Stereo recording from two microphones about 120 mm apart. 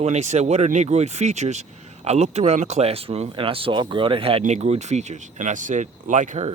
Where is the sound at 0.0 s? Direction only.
70° right (ahead or behind); by 4.4 s 50° right (ahead or behind).